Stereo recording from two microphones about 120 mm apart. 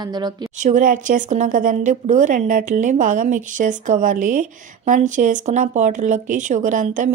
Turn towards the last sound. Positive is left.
turn(degrees=-90)